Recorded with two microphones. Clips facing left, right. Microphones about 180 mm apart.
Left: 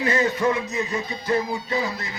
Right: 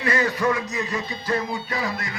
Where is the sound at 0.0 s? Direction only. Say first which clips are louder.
Left 1 dB; 25° left (ahead or behind).